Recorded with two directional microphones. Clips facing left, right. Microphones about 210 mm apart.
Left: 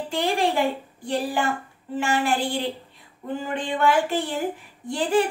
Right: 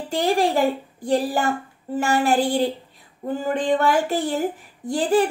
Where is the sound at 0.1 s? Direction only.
40° right (ahead or behind).